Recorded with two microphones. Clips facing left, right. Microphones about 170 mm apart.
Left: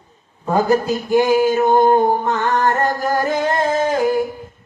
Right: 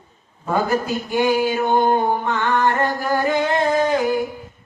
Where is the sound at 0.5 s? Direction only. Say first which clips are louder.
Left 4 dB; 40° left (ahead or behind).